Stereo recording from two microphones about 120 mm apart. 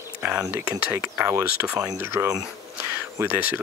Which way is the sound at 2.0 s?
25° right (ahead or behind).